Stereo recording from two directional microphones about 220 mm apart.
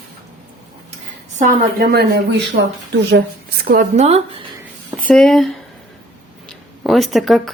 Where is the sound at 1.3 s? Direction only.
40° right (ahead or behind); by 4.5 s 25° right (ahead or behind).